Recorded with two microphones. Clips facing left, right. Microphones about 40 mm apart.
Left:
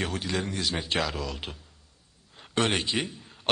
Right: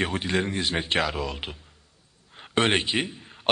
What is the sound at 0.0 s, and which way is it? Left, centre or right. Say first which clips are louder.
A man's voice: right 4 dB; right.